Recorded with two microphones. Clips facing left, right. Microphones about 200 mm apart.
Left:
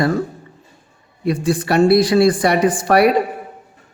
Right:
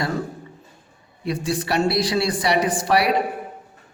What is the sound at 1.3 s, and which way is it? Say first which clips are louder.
Speech: left 6 dB; 50° left (ahead or behind).